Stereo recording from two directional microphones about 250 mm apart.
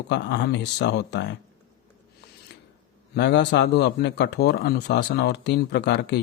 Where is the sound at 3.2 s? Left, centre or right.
Left.